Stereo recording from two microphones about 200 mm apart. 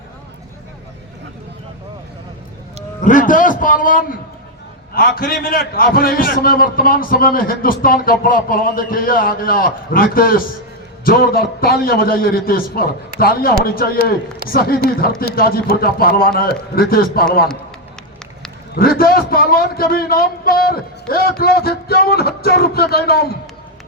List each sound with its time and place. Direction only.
3.0 s a man's voice: 40° left (ahead or behind)
18.7 s a man's voice: 50° left (ahead or behind)